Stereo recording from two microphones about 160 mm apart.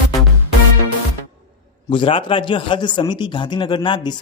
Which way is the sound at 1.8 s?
35° left (ahead or behind).